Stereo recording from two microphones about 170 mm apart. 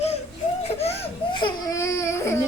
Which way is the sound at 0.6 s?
35° left (ahead or behind).